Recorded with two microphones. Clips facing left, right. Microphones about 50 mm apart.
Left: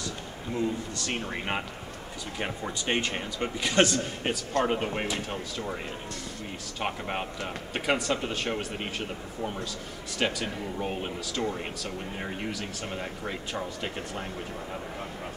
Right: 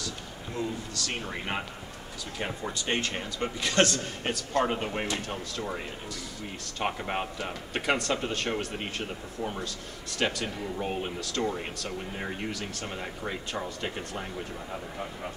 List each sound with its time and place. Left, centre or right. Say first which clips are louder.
0.6 s speech: left 3 dB; left
2.3 s a man's voice: even; centre
6.8 s speech: right 1 dB; centre